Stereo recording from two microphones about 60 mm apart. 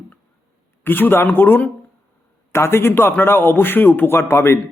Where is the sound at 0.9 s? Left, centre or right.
Left.